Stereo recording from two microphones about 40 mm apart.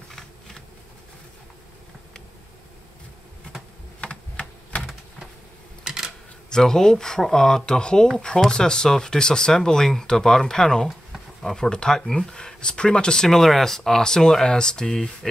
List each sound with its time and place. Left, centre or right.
4.0 s typing: left
5.9 s a sound: centre
6.5 s speech: centre